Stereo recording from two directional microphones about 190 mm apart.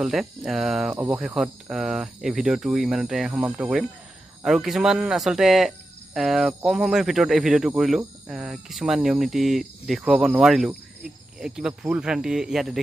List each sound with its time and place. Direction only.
0.0 s speech: centre (ahead or behind)
0.9 s speech: 15° right (ahead or behind)
1.2 s speech: 5° right (ahead or behind)